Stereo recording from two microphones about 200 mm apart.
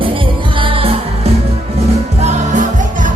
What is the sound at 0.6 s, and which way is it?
Music, 25° right (ahead or behind).